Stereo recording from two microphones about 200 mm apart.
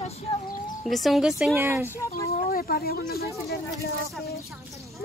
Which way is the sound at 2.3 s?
45° left (ahead or behind).